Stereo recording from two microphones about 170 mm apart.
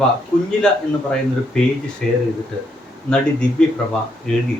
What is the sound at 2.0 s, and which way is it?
Speech, centre (ahead or behind).